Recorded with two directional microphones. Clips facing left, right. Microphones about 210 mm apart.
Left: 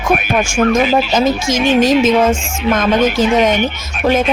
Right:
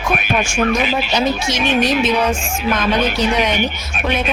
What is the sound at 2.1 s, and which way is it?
Speech, 90° left.